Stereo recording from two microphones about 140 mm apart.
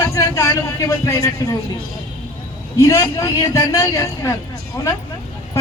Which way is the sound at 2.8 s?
20° left (ahead or behind).